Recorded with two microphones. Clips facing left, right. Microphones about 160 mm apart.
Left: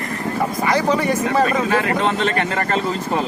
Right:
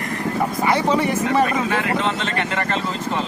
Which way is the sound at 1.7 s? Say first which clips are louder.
Left 3 dB; 45° left (ahead or behind).